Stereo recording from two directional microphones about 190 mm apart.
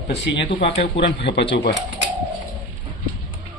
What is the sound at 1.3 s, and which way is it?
Speech, 70° left (ahead or behind).